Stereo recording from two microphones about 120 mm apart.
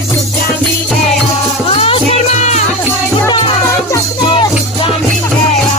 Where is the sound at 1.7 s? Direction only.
55° left (ahead or behind); by 2.6 s 75° left (ahead or behind).